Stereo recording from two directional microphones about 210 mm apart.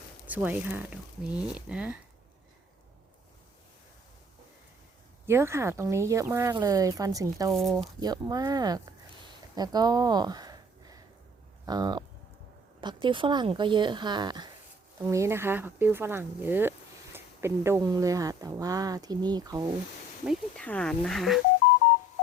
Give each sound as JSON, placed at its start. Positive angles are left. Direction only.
{"t": 0.3, "sound": "speech", "side_deg": -10}
{"t": 5.2, "sound": "speech", "side_deg": -10}
{"t": 20.2, "sound": "speech", "side_deg": 5}